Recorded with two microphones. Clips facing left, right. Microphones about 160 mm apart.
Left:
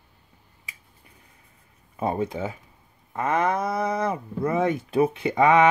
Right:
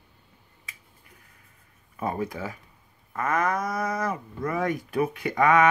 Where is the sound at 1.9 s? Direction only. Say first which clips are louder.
Left 4 dB; 25° left (ahead or behind).